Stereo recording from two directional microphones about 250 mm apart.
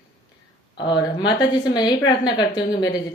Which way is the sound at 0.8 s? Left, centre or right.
Centre.